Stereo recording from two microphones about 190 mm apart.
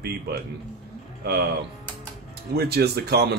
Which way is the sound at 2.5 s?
55° right (ahead or behind).